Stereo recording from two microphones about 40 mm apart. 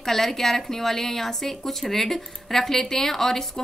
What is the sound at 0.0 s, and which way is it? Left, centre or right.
A woman's voice, centre.